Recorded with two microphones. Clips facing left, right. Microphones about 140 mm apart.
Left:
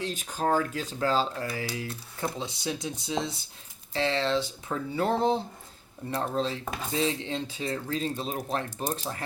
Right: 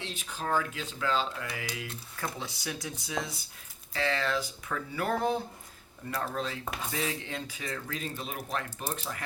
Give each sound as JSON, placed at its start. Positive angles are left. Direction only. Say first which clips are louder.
{"t": 0.0, "sound": "speech", "louder": "left 7 dB", "side_deg": 45}